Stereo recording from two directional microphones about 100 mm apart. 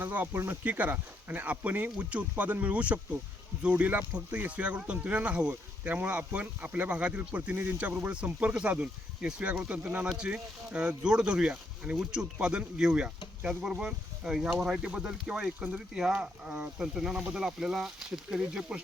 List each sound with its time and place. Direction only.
0.0 s speech: 20° right (ahead or behind)